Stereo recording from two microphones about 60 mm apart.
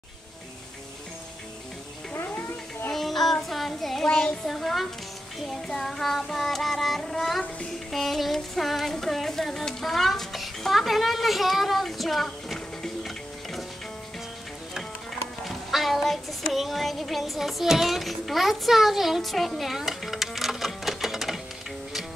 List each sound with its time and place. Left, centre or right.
2.1 s music: left
2.9 s child singing: centre
7.9 s a sound: centre
15.4 s music: centre